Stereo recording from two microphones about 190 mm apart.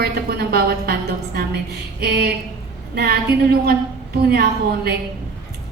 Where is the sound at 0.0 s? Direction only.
55° right (ahead or behind).